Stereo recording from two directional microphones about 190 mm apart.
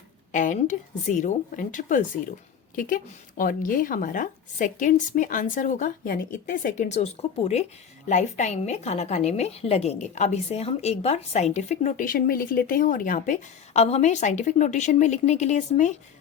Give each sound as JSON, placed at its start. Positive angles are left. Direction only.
{"t": 0.3, "sound": "a woman's voice", "side_deg": 40}